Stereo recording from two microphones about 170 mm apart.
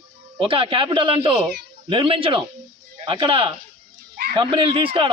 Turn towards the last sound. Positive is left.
turn(degrees=-30)  # may be behind; listen again after turning